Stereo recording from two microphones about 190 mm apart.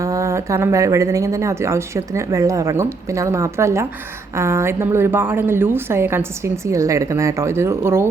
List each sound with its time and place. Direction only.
0.0 s speech: 15° right (ahead or behind)